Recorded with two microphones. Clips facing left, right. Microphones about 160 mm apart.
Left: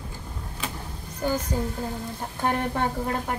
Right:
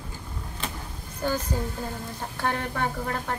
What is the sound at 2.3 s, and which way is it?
Speech, 15° left (ahead or behind).